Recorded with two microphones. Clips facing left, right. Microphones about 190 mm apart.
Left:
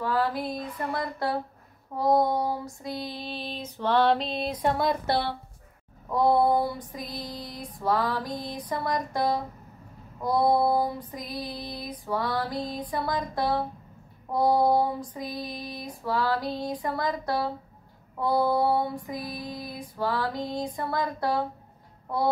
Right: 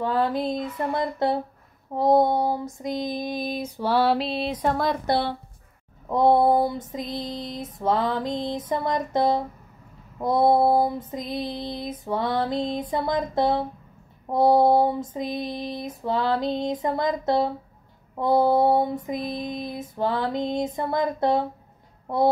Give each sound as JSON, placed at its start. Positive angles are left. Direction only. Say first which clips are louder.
{"t": 0.0, "sound": "female singing", "louder": "right 4 dB", "side_deg": -20}
{"t": 5.0, "sound": "female singing", "louder": "right 3 dB", "side_deg": -20}